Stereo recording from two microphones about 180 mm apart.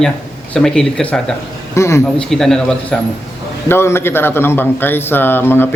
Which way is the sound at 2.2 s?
5° left (ahead or behind).